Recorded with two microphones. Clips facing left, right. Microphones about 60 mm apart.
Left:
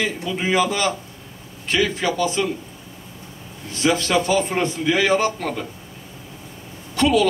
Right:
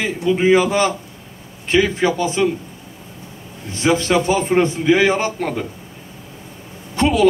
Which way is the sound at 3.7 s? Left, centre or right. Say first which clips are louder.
Right 3 dB; right.